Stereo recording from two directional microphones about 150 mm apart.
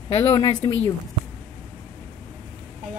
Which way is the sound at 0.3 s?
30° left (ahead or behind).